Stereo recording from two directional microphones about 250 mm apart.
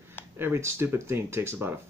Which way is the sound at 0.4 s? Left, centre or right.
Centre.